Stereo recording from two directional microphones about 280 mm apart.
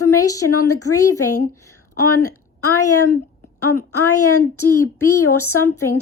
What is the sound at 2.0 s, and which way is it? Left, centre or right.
A woman's voice, left.